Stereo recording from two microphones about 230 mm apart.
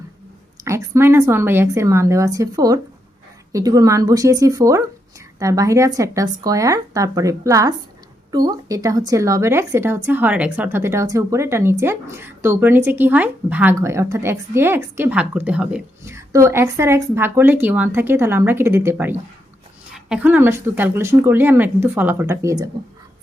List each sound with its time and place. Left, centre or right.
0.6 s speech: centre